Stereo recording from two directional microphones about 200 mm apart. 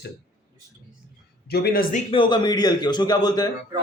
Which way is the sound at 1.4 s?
50° left (ahead or behind).